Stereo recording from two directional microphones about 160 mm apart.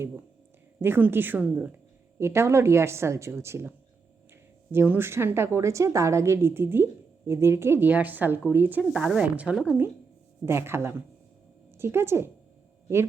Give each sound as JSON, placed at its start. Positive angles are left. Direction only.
{"t": 0.8, "sound": "a woman's voice", "side_deg": -15}